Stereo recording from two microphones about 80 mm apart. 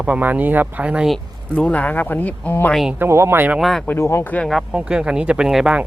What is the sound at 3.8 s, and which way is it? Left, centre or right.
Speech, left.